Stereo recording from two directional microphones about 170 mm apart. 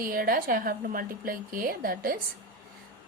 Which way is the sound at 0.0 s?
60° right (ahead or behind).